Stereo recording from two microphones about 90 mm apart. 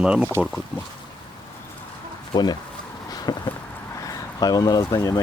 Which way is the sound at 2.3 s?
50° left (ahead or behind).